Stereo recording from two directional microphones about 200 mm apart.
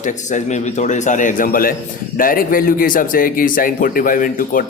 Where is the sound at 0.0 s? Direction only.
40° left (ahead or behind).